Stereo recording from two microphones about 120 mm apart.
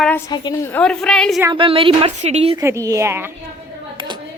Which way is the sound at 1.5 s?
45° right (ahead or behind).